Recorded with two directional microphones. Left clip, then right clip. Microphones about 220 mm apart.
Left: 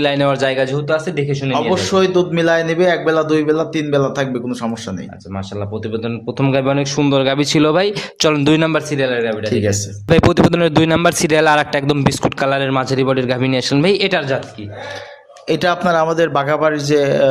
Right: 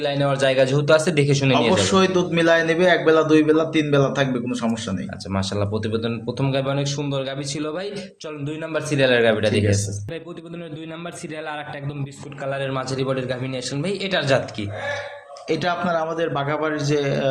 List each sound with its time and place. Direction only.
0.0 s a man's voice: 35° left (ahead or behind)
0.4 s a man's voice: 10° left (ahead or behind); by 1.5 s 5° right (ahead or behind)
1.7 s a man's voice: 25° left (ahead or behind)
5.9 s a man's voice: 15° left (ahead or behind)
6.4 s a man's voice: 30° left (ahead or behind); by 8.7 s 50° left (ahead or behind)
9.1 s speech: 15° right (ahead or behind)
9.6 s a man's voice: 55° left (ahead or behind)
15.4 s speech: 50° left (ahead or behind)